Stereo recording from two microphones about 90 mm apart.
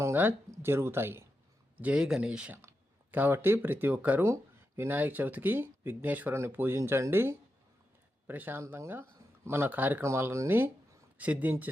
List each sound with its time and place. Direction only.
0.0 s speech: 25° right (ahead or behind)
1.8 s speech: 10° right (ahead or behind)
2.6 s speech: 25° right (ahead or behind)
10.0 s speech: 30° right (ahead or behind)
11.2 s speech: 15° right (ahead or behind)